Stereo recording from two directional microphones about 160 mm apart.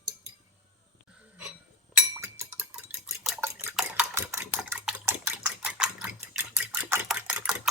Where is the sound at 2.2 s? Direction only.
15° right (ahead or behind).